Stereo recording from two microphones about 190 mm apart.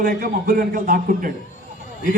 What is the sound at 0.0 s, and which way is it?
A man's voice, 45° right (ahead or behind).